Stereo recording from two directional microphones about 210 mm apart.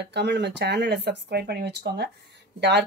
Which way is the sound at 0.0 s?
55° right (ahead or behind).